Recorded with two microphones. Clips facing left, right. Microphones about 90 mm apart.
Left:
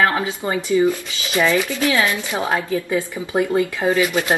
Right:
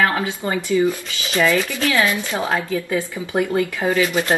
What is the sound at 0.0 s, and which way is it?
A woman's voice, 20° left (ahead or behind).